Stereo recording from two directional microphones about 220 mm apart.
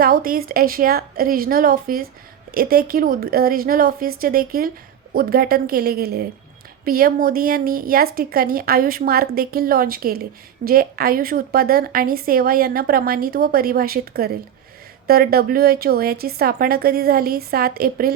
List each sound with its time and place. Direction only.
0.0 s a woman's voice: 40° right (ahead or behind)